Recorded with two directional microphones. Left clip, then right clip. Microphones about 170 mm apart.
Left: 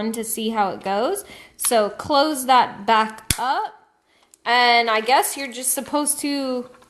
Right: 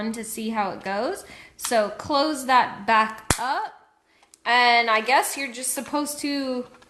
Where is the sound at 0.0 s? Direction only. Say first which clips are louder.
Left 5 dB; 25° left (ahead or behind).